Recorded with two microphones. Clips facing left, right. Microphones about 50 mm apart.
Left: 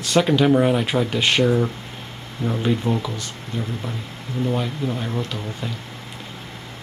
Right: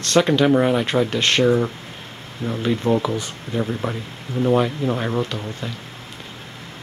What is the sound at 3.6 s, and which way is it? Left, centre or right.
Speech, right.